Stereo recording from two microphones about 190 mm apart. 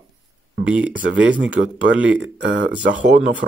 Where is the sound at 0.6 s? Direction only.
5° right (ahead or behind).